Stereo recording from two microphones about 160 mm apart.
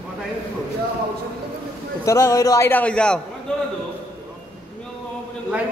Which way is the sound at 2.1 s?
15° left (ahead or behind).